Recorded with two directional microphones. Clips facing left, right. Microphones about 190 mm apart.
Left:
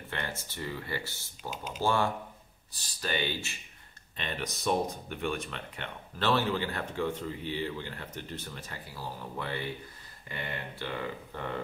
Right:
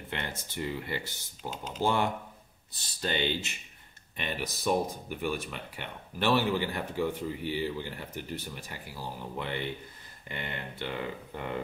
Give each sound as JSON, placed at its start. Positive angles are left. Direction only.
{"t": 0.1, "sound": "speech", "side_deg": -20}
{"t": 4.2, "sound": "speech", "side_deg": -10}